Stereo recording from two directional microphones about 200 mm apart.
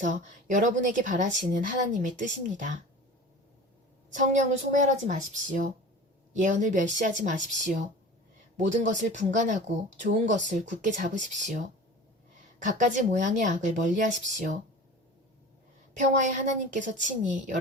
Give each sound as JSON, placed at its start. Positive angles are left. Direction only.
{"t": 0.0, "sound": "speech", "side_deg": -40}
{"t": 4.7, "sound": "speech", "side_deg": -40}
{"t": 12.6, "sound": "speech", "side_deg": -40}
{"t": 16.0, "sound": "speech", "side_deg": -40}